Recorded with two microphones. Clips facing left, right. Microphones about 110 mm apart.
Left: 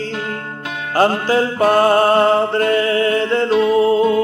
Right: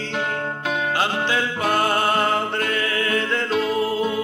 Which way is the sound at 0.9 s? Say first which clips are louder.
Left 12 dB; 40° left (ahead or behind).